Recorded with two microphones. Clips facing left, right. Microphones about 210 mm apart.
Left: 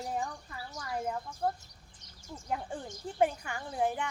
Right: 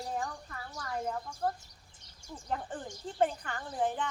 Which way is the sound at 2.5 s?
10° left (ahead or behind).